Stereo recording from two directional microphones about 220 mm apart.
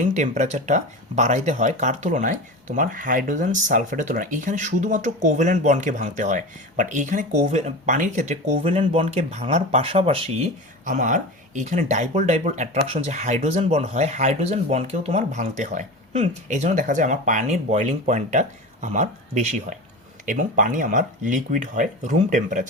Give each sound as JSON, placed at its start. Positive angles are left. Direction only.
{"t": 0.0, "sound": "speech", "side_deg": -35}